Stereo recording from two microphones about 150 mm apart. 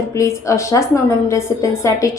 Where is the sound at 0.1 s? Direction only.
20° left (ahead or behind).